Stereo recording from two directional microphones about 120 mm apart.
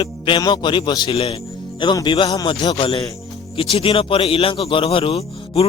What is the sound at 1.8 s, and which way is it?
A man's voice, 40° left (ahead or behind).